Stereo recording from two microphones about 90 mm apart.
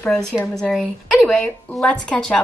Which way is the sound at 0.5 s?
5° left (ahead or behind).